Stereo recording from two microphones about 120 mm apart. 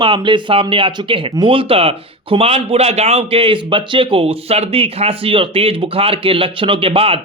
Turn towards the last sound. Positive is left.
turn(degrees=-50)  # may be behind; listen again after turning